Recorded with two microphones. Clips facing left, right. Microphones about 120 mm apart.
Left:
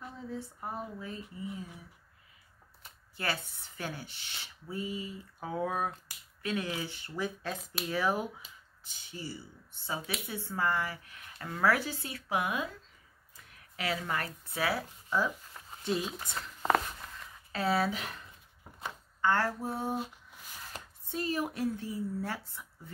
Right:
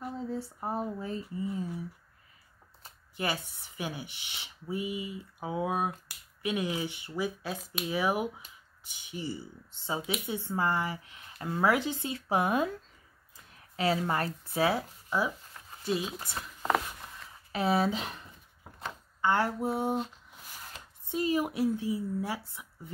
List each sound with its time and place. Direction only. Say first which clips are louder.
0.2 s speech: right 5 dB; 30° right (ahead or behind)
3.2 s speech: right 2 dB; 15° right (ahead or behind)
12.3 s speech: right 5 dB; 35° right (ahead or behind); by 15.3 s 15° right (ahead or behind)
15.8 s speech: right 1 dB; centre (ahead or behind)
17.5 s speech: right 2 dB; 20° right (ahead or behind)
19.2 s speech: right 2 dB; 15° right (ahead or behind)
21.1 s speech: right 4 dB; 15° right (ahead or behind)